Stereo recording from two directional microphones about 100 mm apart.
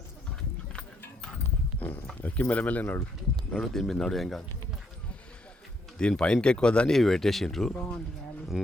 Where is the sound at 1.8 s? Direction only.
20° left (ahead or behind).